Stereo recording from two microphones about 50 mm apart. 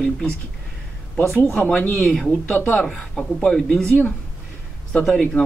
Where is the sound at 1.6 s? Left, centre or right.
Left.